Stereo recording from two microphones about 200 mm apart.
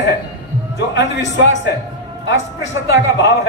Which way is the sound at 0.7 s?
65° left (ahead or behind).